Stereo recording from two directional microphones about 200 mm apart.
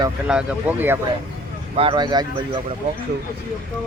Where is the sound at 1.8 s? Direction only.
25° right (ahead or behind).